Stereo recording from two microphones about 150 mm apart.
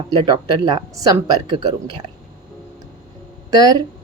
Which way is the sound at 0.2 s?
30° right (ahead or behind).